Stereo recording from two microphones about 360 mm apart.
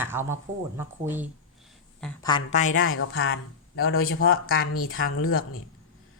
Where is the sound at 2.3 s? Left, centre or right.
Centre.